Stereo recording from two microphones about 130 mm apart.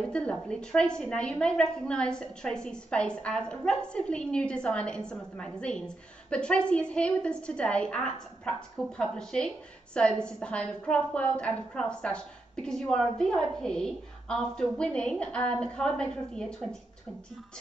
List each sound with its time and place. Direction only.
0.1 s a woman's voice: 5° left (ahead or behind)